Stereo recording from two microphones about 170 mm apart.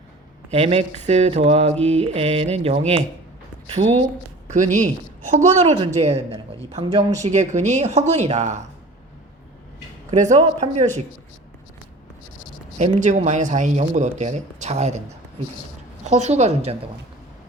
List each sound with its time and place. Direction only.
0.5 s speech: 35° right (ahead or behind)
10.1 s speech: 45° right (ahead or behind)
12.8 s speech: 45° right (ahead or behind)
16.0 s speech: 40° right (ahead or behind)